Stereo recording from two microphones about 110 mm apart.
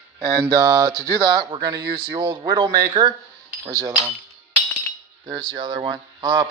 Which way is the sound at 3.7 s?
30° right (ahead or behind).